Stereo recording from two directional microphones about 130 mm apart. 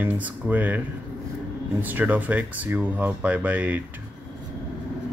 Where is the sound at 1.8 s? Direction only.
15° right (ahead or behind).